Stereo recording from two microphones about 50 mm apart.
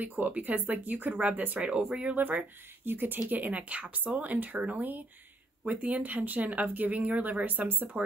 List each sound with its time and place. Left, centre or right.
0.0 s speech: right
4.7 s speech: right